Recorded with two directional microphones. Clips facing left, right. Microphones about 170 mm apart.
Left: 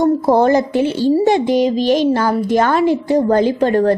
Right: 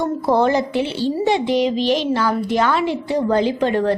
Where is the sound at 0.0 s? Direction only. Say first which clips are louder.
Left 5 dB; 45° left (ahead or behind).